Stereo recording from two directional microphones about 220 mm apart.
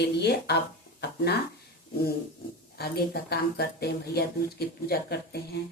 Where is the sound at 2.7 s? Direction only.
45° left (ahead or behind).